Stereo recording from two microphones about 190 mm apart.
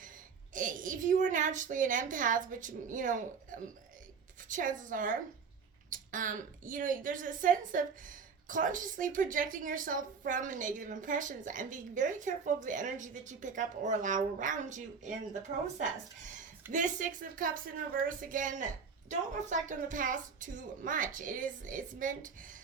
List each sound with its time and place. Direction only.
0.5 s a woman's voice: 45° right (ahead or behind)
16.7 s a woman's voice: 45° right (ahead or behind)